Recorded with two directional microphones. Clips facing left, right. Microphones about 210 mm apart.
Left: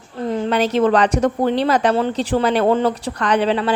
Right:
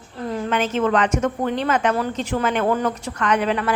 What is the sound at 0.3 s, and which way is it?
A woman's voice, 30° left (ahead or behind).